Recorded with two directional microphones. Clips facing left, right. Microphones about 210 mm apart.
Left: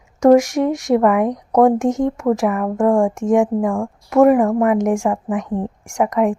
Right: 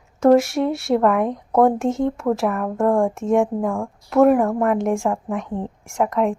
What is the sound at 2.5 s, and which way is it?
A woman's voice, 5° left (ahead or behind).